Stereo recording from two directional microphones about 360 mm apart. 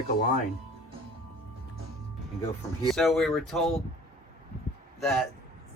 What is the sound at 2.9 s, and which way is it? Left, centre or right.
Speech, centre.